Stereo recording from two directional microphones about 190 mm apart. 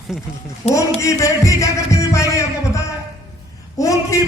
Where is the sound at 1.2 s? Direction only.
15° left (ahead or behind).